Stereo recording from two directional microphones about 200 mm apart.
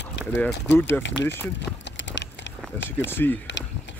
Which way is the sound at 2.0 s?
65° left (ahead or behind).